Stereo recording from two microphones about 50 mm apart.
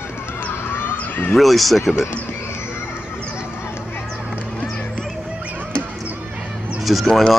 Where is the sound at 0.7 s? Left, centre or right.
Left.